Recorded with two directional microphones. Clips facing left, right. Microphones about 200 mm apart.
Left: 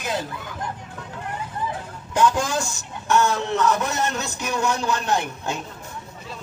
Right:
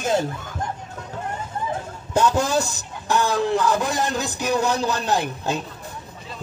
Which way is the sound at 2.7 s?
35° right (ahead or behind).